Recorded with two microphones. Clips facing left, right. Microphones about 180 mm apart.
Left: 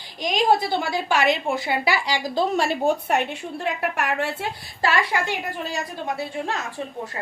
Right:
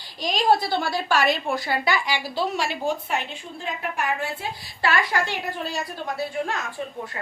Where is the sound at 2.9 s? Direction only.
65° left (ahead or behind).